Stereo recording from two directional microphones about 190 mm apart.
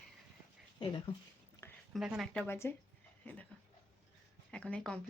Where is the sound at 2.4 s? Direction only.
10° left (ahead or behind).